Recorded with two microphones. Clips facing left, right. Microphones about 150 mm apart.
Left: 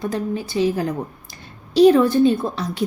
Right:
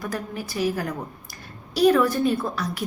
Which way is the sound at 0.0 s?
25° left (ahead or behind).